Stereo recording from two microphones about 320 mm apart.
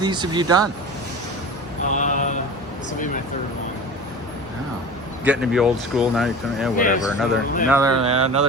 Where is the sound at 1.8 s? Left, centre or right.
Left.